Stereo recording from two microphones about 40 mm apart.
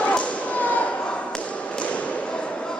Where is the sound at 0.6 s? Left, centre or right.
Left.